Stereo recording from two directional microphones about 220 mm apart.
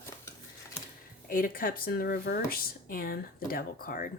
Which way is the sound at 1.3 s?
40° left (ahead or behind).